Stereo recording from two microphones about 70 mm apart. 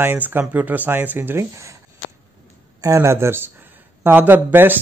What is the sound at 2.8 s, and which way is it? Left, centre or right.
Speech, right.